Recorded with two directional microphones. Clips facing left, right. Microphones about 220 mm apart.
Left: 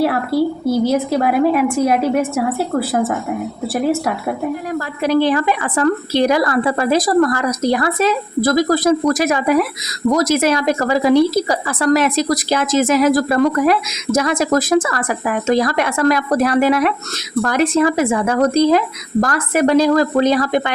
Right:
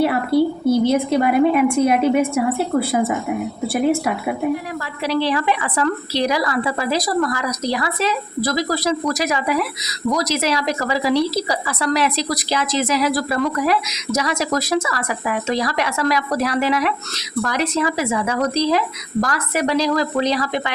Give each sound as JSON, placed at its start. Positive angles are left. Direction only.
{"t": 0.0, "sound": "a woman's voice", "side_deg": 0}
{"t": 5.0, "sound": "a woman's voice", "side_deg": 50}